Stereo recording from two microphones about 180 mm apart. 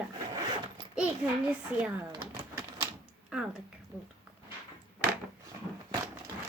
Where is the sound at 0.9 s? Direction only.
5° right (ahead or behind).